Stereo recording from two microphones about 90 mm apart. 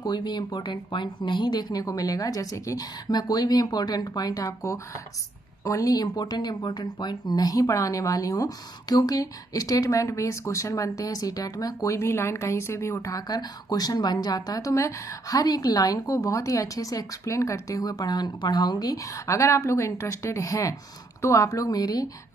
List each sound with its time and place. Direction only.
0.0 s speech: 55° left (ahead or behind)
14.7 s speech: 35° left (ahead or behind)